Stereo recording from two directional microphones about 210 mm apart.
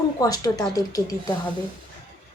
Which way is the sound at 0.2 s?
20° left (ahead or behind).